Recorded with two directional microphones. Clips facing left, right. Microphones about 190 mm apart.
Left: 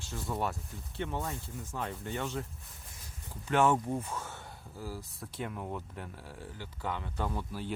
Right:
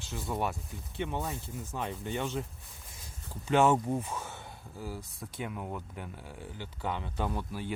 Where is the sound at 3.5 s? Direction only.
20° right (ahead or behind).